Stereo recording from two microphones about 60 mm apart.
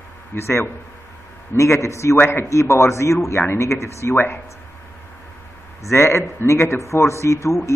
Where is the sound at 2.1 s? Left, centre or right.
Left.